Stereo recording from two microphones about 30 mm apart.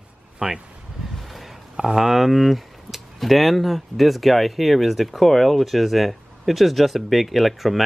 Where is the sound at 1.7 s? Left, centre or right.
Centre.